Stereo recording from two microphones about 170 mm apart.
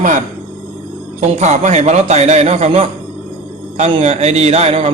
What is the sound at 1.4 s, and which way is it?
A man's voice, 40° right (ahead or behind).